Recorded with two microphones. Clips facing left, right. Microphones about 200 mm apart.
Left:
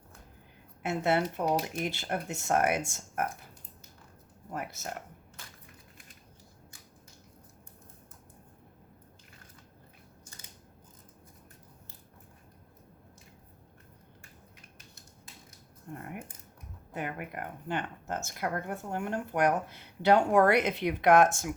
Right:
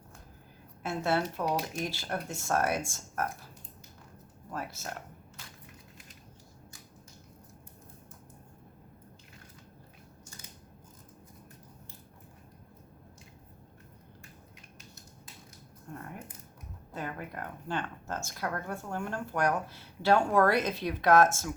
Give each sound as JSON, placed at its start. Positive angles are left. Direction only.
{"t": 0.8, "sound": "speech", "side_deg": 20}
{"t": 1.5, "sound": "speech", "side_deg": 50}
{"t": 1.8, "sound": "speech", "side_deg": 20}
{"t": 4.5, "sound": "speech", "side_deg": 20}
{"t": 15.9, "sound": "a sound", "side_deg": 20}
{"t": 16.9, "sound": "speech", "side_deg": 15}